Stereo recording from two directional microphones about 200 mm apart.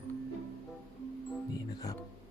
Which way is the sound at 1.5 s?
15° left (ahead or behind).